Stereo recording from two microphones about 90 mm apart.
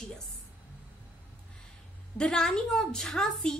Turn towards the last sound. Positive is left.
turn(degrees=5)  # may be behind; listen again after turning